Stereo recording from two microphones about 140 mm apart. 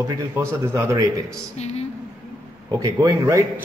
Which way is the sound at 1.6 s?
50° left (ahead or behind).